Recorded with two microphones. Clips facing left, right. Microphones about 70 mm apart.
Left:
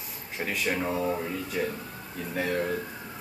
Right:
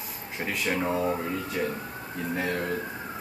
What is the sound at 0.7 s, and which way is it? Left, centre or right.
Speech, centre.